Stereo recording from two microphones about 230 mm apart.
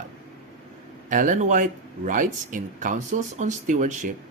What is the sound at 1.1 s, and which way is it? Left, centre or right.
Speech, right.